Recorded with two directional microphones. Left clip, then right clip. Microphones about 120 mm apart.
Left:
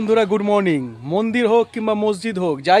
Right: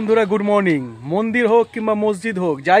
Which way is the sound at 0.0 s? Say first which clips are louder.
Even; 20° left (ahead or behind).